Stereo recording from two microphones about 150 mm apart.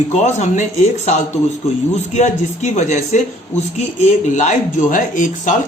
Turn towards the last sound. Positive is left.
turn(degrees=60)  # may be behind; listen again after turning